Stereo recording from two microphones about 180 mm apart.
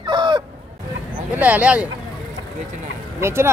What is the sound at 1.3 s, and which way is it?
Speech, 10° right (ahead or behind).